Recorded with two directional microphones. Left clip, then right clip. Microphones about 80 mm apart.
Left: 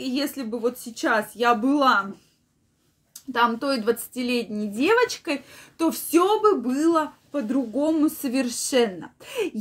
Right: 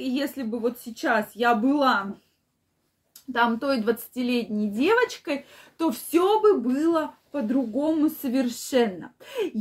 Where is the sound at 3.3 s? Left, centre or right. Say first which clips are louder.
Left 1 dB; centre.